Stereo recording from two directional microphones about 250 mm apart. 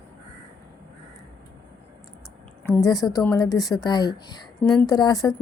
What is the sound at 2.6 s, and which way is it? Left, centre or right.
A woman's voice, centre.